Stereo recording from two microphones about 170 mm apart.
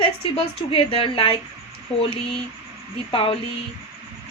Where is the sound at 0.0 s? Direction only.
30° left (ahead or behind).